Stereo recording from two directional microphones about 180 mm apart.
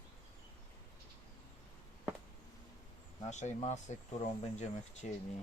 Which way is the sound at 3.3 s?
40° left (ahead or behind).